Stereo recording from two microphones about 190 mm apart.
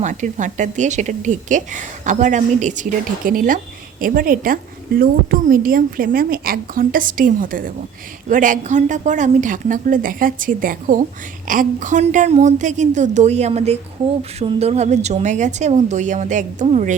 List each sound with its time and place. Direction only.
0.0 s a woman's voice: 40° right (ahead or behind)